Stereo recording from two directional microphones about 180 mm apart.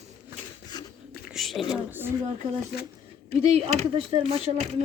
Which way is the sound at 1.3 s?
Centre (ahead or behind).